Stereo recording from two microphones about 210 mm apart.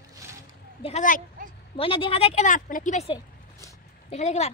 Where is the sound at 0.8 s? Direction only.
35° left (ahead or behind).